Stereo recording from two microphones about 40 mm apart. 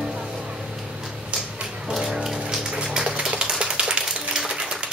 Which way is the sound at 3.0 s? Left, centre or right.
Centre.